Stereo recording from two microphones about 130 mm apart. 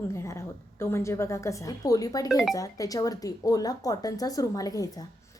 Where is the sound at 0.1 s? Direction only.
25° left (ahead or behind).